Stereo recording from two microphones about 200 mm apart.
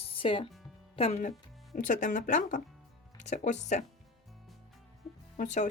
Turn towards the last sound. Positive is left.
turn(degrees=35)  # may be behind; listen again after turning